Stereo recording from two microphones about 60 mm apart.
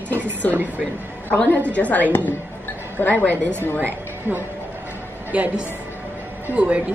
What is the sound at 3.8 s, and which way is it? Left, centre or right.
Speech, right.